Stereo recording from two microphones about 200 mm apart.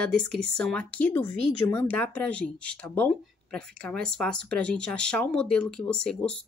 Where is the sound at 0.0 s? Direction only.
5° left (ahead or behind).